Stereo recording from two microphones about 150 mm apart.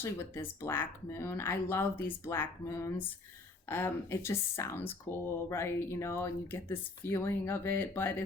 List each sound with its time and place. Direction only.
0.0 s speech: 15° left (ahead or behind)